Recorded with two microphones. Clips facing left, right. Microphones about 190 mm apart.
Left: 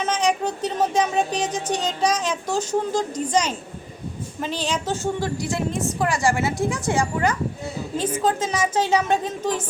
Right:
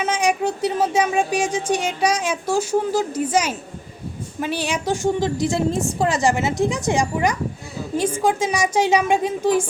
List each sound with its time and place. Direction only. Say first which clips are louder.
0.0 s speech: right 2 dB; 10° right (ahead or behind)